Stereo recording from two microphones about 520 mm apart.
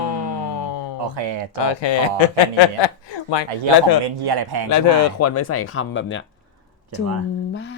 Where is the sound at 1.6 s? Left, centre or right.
Left.